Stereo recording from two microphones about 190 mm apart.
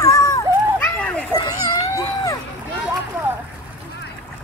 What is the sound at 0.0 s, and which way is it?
Children playing, 15° left (ahead or behind).